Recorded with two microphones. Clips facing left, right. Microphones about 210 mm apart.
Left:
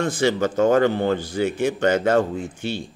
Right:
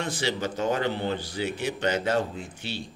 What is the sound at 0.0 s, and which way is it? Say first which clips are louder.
Speech: left 8 dB; 50° left (ahead or behind).